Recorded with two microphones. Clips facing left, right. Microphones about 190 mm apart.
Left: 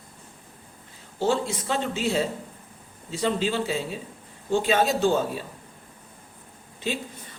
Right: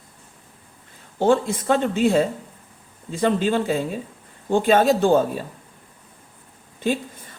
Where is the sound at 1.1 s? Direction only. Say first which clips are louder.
Right 6 dB; 55° right (ahead or behind).